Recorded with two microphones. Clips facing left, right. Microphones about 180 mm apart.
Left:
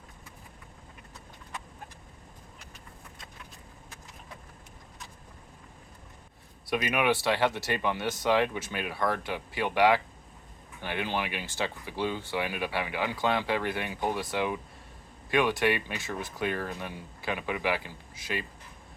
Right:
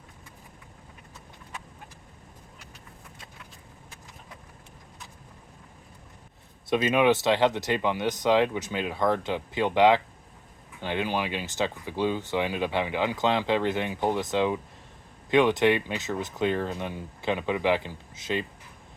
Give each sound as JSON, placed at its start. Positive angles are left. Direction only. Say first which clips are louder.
{"t": 6.7, "sound": "speech", "louder": "right 5 dB", "side_deg": -25}